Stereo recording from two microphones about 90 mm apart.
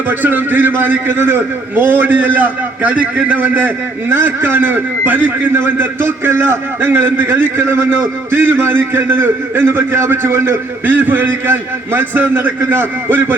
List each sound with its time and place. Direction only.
0.1 s a man's voice: 20° right (ahead or behind)